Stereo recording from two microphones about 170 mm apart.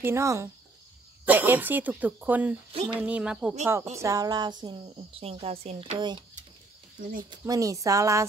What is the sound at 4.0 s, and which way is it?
Speech, 20° right (ahead or behind).